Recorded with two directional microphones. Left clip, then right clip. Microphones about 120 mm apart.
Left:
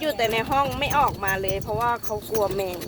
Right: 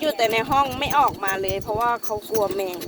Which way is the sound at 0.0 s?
40° right (ahead or behind).